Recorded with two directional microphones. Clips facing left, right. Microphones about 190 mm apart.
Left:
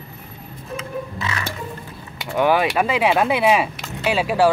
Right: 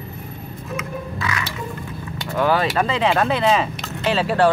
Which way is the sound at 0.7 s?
30° left (ahead or behind).